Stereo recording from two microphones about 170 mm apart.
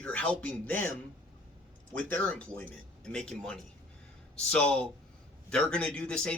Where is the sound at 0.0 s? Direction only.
5° left (ahead or behind).